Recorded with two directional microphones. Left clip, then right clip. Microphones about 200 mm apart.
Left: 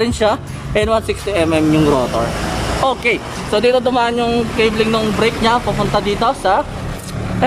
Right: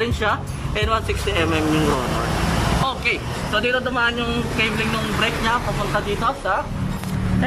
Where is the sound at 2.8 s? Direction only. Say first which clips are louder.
Left 6 dB; 30° left (ahead or behind).